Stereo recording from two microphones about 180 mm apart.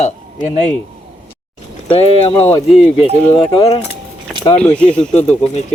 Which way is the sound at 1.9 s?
30° left (ahead or behind).